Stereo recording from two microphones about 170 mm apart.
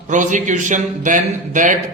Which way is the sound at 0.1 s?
45° right (ahead or behind).